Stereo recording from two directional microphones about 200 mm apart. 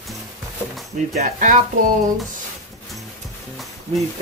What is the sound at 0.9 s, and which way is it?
Speech, 40° right (ahead or behind).